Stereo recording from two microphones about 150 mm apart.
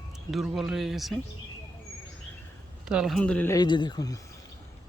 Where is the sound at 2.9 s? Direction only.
Centre (ahead or behind).